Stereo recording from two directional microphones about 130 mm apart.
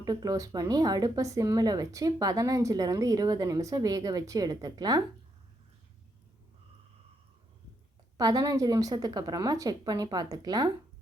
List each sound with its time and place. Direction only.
0.0 s speech: 30° right (ahead or behind)
8.2 s speech: 30° right (ahead or behind)